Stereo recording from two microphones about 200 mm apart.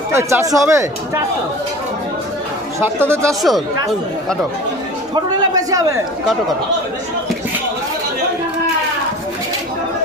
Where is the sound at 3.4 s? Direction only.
Centre (ahead or behind).